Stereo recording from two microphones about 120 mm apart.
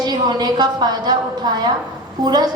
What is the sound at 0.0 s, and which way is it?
A woman's voice, 35° right (ahead or behind).